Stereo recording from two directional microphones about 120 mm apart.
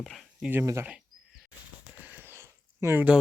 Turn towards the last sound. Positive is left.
turn(degrees=-15)  # may be behind; listen again after turning